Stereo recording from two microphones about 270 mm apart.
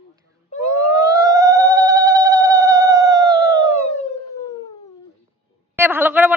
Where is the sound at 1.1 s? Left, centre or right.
Centre.